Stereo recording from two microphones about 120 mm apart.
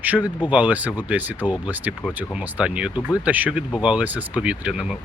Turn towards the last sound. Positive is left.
turn(degrees=-10)  # may be behind; listen again after turning